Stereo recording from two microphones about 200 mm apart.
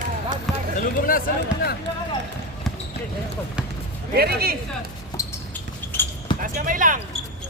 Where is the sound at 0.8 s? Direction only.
45° left (ahead or behind).